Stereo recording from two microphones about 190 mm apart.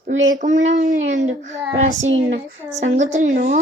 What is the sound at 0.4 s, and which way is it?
Speech, 40° right (ahead or behind).